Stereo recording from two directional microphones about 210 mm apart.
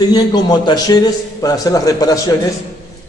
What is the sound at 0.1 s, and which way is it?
A man's voice, 20° left (ahead or behind).